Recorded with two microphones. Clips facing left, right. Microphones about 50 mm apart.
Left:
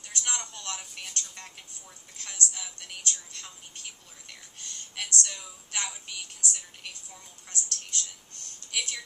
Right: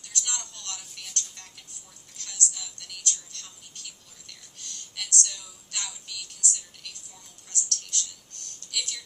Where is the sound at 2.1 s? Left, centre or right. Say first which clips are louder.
Left 1 dB; left.